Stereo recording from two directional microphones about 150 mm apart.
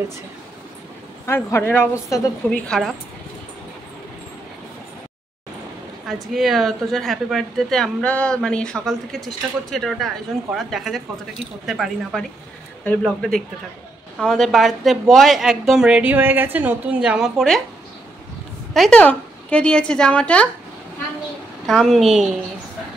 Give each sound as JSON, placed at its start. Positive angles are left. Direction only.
{"t": 1.2, "sound": "a woman's voice", "side_deg": 15}
{"t": 6.3, "sound": "speech", "side_deg": 0}
{"t": 18.7, "sound": "a woman's voice", "side_deg": 5}
{"t": 21.6, "sound": "speech", "side_deg": 0}